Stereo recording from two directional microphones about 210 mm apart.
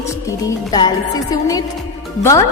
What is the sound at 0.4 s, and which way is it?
A woman's voice, 20° left (ahead or behind).